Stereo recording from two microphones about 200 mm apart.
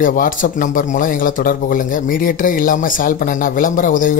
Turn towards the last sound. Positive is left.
turn(degrees=40)  # may be behind; listen again after turning